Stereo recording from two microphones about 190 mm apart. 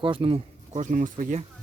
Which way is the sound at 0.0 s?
25° right (ahead or behind).